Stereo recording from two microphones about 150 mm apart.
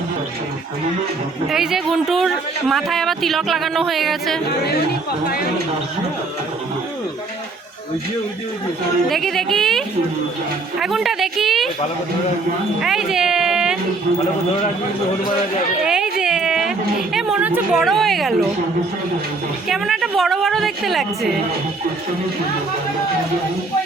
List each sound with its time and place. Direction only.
1.5 s speech: 5° right (ahead or behind)
4.4 s speech: 90° left
9.0 s speech: centre (ahead or behind)
12.8 s speech: 5° right (ahead or behind)
15.8 s a sound: 5° right (ahead or behind)
17.2 s a woman's voice: 5° right (ahead or behind)
19.6 s speech: centre (ahead or behind)